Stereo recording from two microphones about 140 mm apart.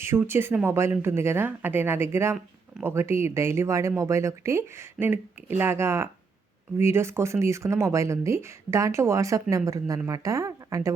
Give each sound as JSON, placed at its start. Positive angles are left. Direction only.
{"t": 0.0, "sound": "speech", "side_deg": -15}